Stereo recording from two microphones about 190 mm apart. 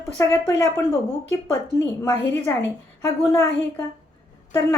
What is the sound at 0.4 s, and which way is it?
A woman's voice, 15° left (ahead or behind).